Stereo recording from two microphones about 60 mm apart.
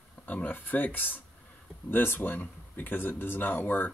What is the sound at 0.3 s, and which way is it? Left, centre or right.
Speech, left.